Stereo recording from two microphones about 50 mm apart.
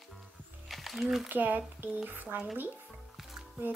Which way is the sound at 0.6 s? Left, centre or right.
Centre.